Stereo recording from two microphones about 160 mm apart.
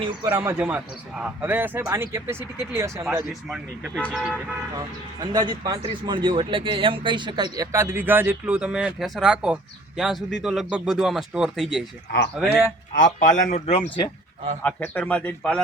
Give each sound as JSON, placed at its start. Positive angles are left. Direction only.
{"t": 0.3, "sound": "a man's voice", "side_deg": -15}
{"t": 3.9, "sound": "speech", "side_deg": 0}
{"t": 5.2, "sound": "speech", "side_deg": -25}
{"t": 12.9, "sound": "speech", "side_deg": 50}
{"t": 14.6, "sound": "a man's voice", "side_deg": 10}